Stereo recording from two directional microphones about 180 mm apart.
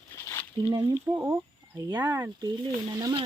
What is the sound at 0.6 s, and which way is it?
A child's voice, 20° right (ahead or behind).